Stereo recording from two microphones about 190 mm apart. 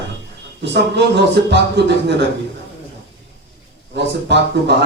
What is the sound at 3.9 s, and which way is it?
Speech, 65° right (ahead or behind).